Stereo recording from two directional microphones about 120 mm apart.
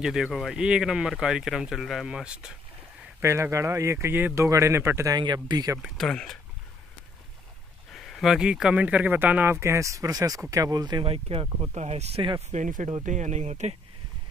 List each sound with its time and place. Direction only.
0.0 s speech: 5° right (ahead or behind)
3.2 s speech: 20° right (ahead or behind)
5.1 s speech: 35° right (ahead or behind)
5.8 s speech: 5° left (ahead or behind)
7.9 s speech: centre (ahead or behind); by 11.1 s 35° right (ahead or behind)
11.1 s speech: 50° right (ahead or behind)
11.7 s speech: 65° right (ahead or behind)
12.4 s speech: 85° right